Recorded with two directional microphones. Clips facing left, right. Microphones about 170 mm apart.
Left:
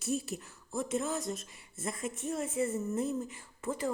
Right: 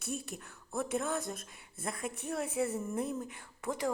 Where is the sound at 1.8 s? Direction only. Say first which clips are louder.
Left 2 dB; 60° right (ahead or behind).